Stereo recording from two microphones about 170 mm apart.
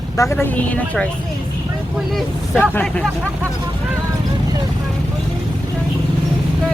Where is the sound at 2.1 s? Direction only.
10° left (ahead or behind).